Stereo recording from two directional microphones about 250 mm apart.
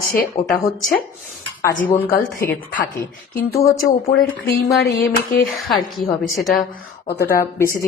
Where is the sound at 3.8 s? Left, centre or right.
Left.